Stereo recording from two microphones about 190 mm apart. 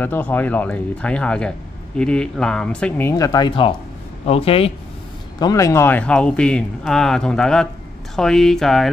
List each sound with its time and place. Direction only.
0.0 s speech: 10° left (ahead or behind); by 4.7 s 30° left (ahead or behind)
5.4 s speech: 20° left (ahead or behind); by 8.9 s centre (ahead or behind)